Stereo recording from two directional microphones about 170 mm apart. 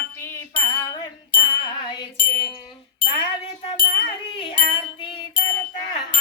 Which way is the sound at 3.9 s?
30° left (ahead or behind).